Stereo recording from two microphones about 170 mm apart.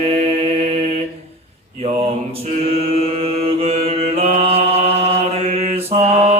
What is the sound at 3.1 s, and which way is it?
Mantra, 35° right (ahead or behind).